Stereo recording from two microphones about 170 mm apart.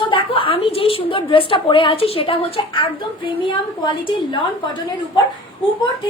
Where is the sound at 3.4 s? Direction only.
30° left (ahead or behind).